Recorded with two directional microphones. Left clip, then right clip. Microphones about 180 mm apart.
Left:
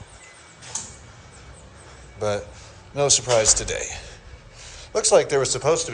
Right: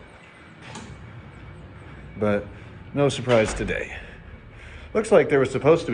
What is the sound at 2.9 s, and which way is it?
Speech, 20° left (ahead or behind).